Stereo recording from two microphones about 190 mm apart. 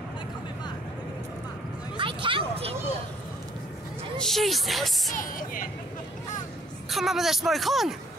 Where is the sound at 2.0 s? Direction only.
25° right (ahead or behind).